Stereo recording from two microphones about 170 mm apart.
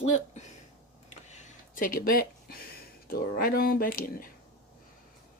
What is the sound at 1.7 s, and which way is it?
Speech, 55° left (ahead or behind).